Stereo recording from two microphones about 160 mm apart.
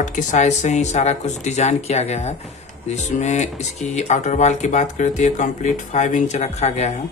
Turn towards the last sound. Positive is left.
turn(degrees=45)  # may be behind; listen again after turning